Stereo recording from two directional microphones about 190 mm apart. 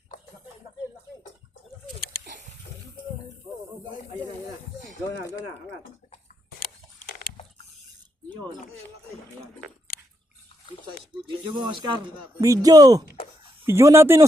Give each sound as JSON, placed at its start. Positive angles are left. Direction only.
{"t": 11.3, "sound": "speech", "side_deg": -25}